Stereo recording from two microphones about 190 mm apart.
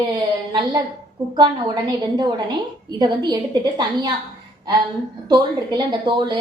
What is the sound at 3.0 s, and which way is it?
A woman's voice, 20° right (ahead or behind).